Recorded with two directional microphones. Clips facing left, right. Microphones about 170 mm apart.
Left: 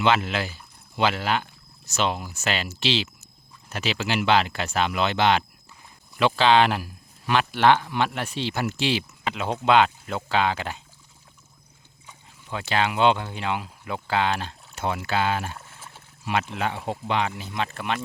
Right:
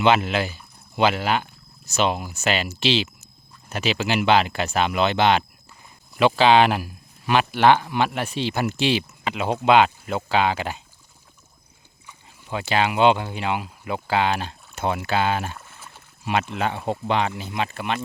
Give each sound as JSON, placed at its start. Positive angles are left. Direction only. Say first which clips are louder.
{"t": 0.0, "sound": "speech", "louder": "right 3 dB", "side_deg": -15}
{"t": 12.5, "sound": "speech", "louder": "right 3 dB", "side_deg": -10}
{"t": 17.3, "sound": "speech", "louder": "right 3 dB", "side_deg": -20}
{"t": 17.6, "sound": "speech", "louder": "right 2 dB", "side_deg": -5}